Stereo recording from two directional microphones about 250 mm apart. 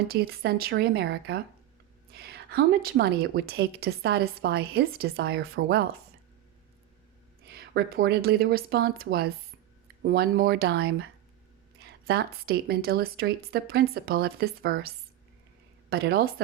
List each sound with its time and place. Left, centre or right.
0.1 s a woman's voice: right
7.4 s a woman's voice: right